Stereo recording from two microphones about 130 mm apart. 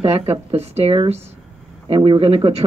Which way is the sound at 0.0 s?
55° right (ahead or behind).